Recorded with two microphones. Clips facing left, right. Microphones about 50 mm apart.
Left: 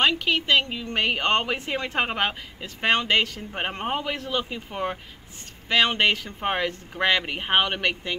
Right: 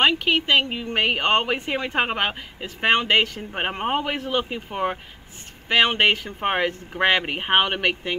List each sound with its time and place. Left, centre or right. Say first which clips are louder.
0.0 s speech: right 3 dB; centre